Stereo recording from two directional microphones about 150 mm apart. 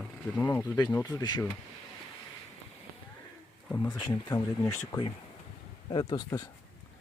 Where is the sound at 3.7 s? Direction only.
25° left (ahead or behind).